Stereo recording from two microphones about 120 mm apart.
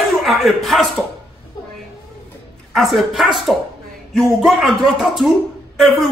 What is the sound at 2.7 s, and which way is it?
Speech, centre (ahead or behind).